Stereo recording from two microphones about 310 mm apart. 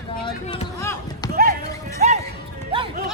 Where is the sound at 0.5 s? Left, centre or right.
Centre.